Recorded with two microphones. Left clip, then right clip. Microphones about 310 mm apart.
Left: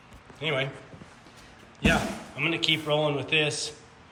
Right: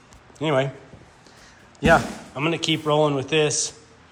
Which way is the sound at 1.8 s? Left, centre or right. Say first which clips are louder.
Right 8 dB; centre.